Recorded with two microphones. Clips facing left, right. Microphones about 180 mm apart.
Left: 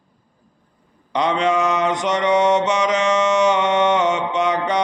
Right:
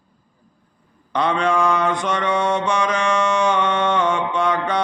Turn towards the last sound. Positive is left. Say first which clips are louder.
# left 1 dB
turn(degrees=20)  # may be behind; listen again after turning